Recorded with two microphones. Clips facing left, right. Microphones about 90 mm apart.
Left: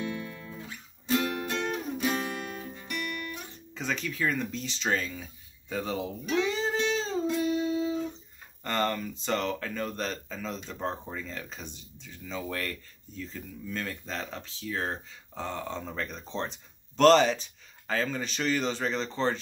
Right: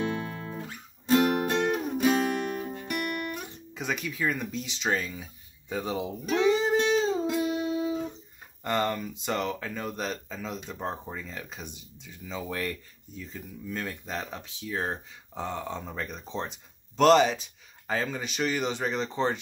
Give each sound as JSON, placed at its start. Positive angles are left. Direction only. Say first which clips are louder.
{"t": 0.2, "sound": "music", "louder": "right 4 dB", "side_deg": -50}
{"t": 3.7, "sound": "speech", "louder": "even", "side_deg": -10}
{"t": 6.3, "sound": "music", "louder": "right 5 dB", "side_deg": -20}
{"t": 8.6, "sound": "speech", "louder": "right 1 dB", "side_deg": -15}